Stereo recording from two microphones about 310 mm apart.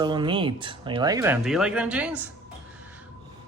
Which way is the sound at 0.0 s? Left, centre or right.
Centre.